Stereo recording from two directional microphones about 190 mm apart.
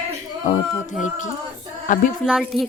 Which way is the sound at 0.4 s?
40° left (ahead or behind).